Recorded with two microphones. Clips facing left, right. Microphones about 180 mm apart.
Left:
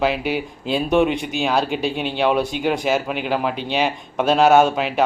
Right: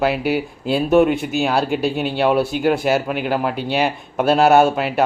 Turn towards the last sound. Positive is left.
turn(degrees=-5)  # may be behind; listen again after turning